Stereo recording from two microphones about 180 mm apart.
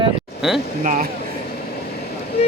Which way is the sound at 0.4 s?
5° right (ahead or behind).